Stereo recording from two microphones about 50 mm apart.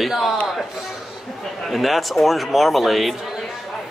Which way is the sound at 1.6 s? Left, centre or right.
Centre.